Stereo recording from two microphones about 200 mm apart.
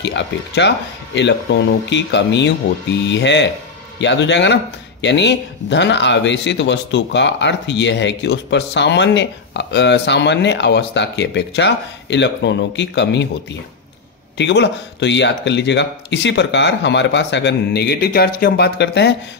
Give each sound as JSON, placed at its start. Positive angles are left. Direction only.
{"t": 0.0, "sound": "speech", "side_deg": 60}